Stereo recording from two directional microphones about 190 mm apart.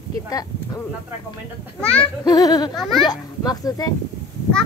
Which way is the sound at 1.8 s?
5° left (ahead or behind).